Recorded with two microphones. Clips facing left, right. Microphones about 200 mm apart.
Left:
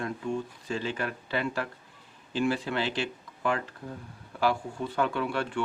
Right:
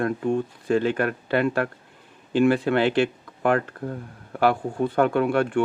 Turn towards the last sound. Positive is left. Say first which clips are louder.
# right 9 dB
turn(degrees=-55)  # may be behind; listen again after turning